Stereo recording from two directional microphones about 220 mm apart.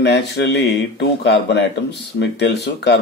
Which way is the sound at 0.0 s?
50° left (ahead or behind).